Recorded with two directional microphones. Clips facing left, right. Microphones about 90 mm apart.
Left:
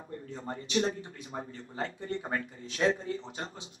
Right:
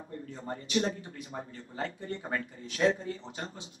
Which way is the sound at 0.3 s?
30° left (ahead or behind).